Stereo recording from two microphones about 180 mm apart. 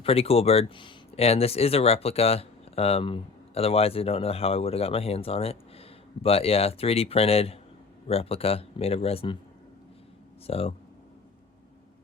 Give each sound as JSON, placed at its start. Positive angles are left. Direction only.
{"t": 0.0, "sound": "speech", "side_deg": 35}
{"t": 10.4, "sound": "speech", "side_deg": 35}